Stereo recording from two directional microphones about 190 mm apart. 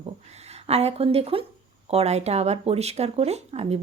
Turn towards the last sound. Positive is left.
turn(degrees=-35)  # may be behind; listen again after turning